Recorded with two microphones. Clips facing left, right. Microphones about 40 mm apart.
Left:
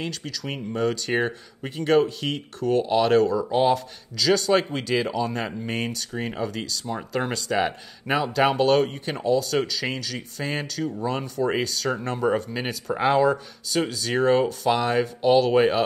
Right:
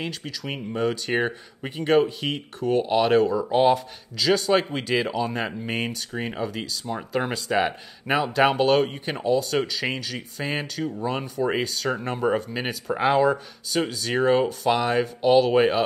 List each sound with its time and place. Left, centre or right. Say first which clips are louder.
0.0 s speech: even; centre